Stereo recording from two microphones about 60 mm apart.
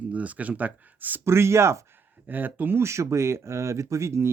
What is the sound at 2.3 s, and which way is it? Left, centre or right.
Speech, right.